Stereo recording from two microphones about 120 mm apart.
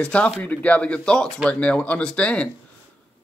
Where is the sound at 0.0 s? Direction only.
10° left (ahead or behind).